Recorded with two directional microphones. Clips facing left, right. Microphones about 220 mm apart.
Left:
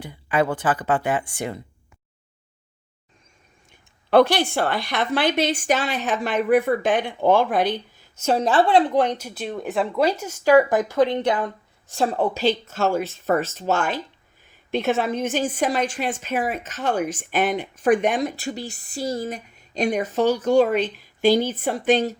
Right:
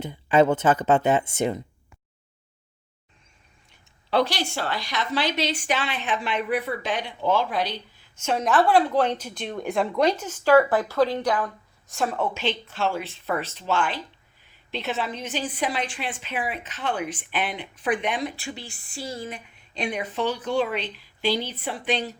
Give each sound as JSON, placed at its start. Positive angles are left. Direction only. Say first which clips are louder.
{"t": 0.0, "sound": "speech", "louder": "right 3 dB", "side_deg": -25}
{"t": 4.1, "sound": "a woman's voice", "louder": "left 7 dB", "side_deg": 55}